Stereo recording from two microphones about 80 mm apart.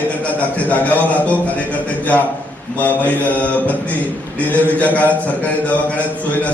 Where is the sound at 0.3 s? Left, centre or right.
Centre.